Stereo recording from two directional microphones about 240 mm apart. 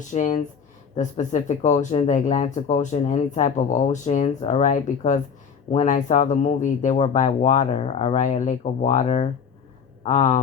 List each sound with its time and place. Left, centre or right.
0.1 s speech: left